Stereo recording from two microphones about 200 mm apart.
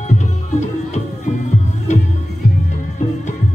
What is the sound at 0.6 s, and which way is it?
Music, 35° left (ahead or behind).